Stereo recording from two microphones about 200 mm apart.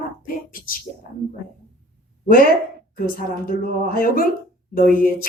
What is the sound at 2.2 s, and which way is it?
A woman's voice, 45° left (ahead or behind).